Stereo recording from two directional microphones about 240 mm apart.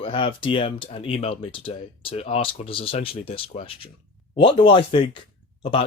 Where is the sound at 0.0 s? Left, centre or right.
Left.